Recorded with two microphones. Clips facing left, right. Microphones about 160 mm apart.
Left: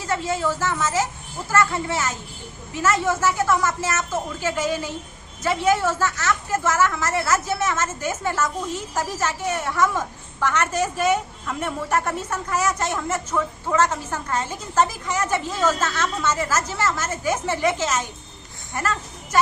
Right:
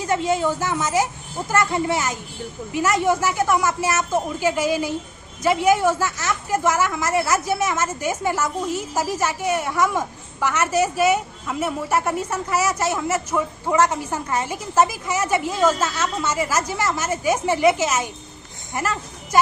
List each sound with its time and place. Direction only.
0.0 s a woman's voice: 15° right (ahead or behind)